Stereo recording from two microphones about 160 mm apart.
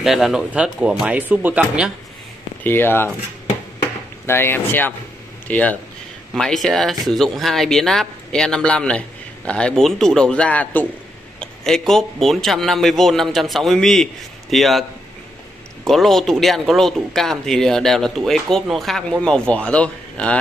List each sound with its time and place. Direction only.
0.0 s speech: centre (ahead or behind)
2.6 s speech: 15° left (ahead or behind)
4.3 s speech: 15° left (ahead or behind)